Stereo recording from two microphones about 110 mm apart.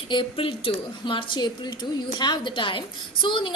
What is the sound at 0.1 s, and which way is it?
A woman's voice, 50° left (ahead or behind).